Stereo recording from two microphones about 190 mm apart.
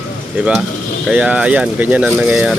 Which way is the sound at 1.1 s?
5° right (ahead or behind).